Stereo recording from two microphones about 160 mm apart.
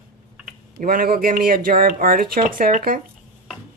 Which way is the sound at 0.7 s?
65° right (ahead or behind).